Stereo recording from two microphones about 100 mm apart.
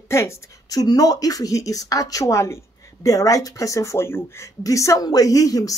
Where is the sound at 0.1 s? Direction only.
30° left (ahead or behind).